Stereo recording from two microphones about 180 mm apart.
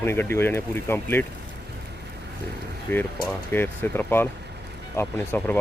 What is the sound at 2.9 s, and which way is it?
Speech, 10° left (ahead or behind).